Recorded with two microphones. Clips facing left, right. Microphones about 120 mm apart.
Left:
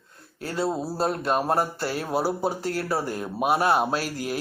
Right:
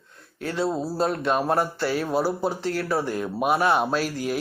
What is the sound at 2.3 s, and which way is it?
Speech, 10° left (ahead or behind).